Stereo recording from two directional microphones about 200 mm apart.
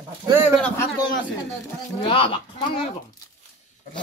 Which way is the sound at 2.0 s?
25° left (ahead or behind).